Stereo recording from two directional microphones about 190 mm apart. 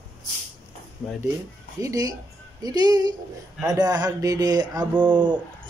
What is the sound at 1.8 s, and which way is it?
A woman's voice, 15° right (ahead or behind).